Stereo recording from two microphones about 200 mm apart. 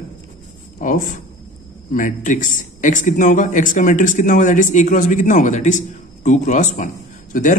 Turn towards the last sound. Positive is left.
turn(degrees=40)  # may be behind; listen again after turning